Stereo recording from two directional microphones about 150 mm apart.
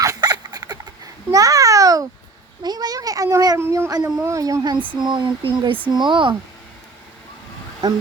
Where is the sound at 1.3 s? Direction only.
25° right (ahead or behind).